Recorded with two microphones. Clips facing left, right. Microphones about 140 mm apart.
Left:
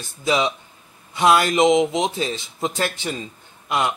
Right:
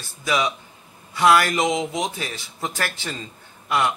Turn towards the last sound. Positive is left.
turn(degrees=20)  # may be behind; listen again after turning